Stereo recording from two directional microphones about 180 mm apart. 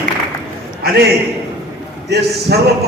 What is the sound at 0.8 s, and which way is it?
A man's voice, 65° right (ahead or behind).